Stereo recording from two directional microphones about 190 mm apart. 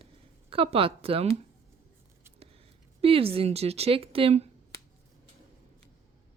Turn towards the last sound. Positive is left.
turn(degrees=-30)  # may be behind; listen again after turning